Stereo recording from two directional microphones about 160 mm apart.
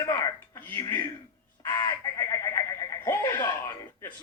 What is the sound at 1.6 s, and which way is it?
Frog, 20° left (ahead or behind).